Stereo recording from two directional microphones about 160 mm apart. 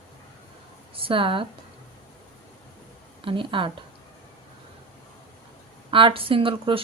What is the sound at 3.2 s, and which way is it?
Speech, 35° right (ahead or behind).